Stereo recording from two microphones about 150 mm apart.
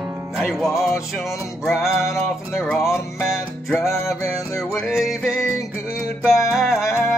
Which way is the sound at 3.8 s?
20° left (ahead or behind).